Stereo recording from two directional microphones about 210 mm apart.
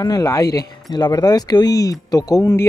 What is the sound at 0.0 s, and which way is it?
Speech, 15° left (ahead or behind).